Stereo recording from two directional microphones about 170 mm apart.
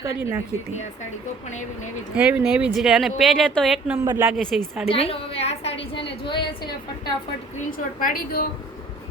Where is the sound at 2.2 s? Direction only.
5° right (ahead or behind).